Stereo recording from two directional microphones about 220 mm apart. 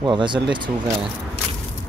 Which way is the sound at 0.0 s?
20° right (ahead or behind).